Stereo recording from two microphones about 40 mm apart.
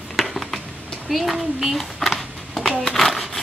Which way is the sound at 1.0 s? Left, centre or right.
Centre.